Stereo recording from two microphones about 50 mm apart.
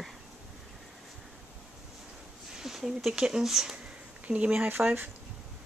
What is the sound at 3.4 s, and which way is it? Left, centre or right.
Speech, centre.